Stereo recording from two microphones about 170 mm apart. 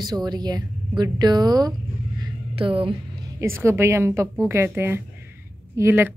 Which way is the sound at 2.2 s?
30° right (ahead or behind).